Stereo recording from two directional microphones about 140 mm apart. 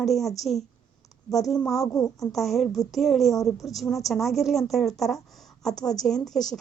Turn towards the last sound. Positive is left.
turn(degrees=5)  # may be behind; listen again after turning